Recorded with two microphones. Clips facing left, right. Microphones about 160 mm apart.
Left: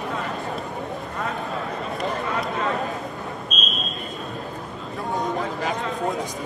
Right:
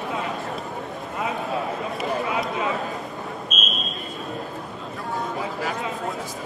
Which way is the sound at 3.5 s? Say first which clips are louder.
Even; centre (ahead or behind).